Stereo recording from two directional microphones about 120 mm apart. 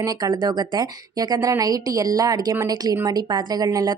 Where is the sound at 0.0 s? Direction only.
30° right (ahead or behind).